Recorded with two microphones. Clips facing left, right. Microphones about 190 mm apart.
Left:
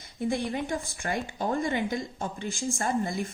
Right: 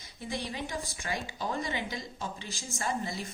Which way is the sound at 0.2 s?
50° left (ahead or behind).